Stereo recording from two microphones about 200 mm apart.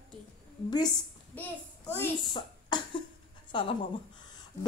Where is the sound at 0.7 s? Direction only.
20° left (ahead or behind).